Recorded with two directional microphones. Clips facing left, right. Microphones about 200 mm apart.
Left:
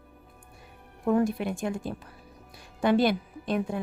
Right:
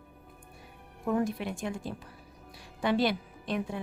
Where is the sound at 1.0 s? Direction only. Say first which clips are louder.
Left 5 dB; 50° left (ahead or behind).